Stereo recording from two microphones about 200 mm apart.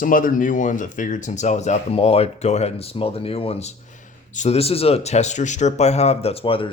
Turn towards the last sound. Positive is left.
turn(degrees=25)  # may be behind; listen again after turning